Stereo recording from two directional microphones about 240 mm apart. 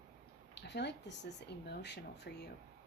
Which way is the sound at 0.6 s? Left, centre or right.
Left.